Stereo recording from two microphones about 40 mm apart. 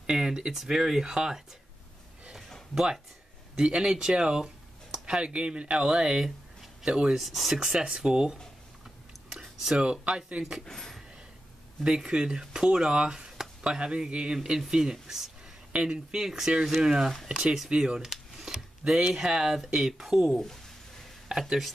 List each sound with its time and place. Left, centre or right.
0.1 s a sound: centre
0.5 s speech: centre
2.7 s speech: centre
7.2 s speech: centre
7.5 s speech: centre
9.3 s a sound: centre
9.8 s speech: right
10.6 s speech: centre
11.8 s speech: right
16.2 s speech: centre
17.6 s speech: right
18.0 s a sound: centre
19.1 s speech: centre